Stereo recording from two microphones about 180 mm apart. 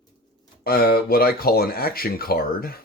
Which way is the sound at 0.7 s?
55° left (ahead or behind).